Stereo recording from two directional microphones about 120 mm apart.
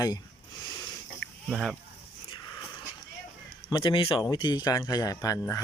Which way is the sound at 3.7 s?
35° left (ahead or behind).